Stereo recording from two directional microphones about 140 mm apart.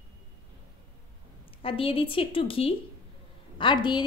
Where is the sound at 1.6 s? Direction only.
40° left (ahead or behind).